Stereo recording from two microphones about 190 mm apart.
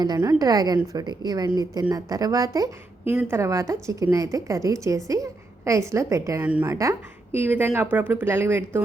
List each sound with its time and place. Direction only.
0.0 s a woman's voice: 20° right (ahead or behind)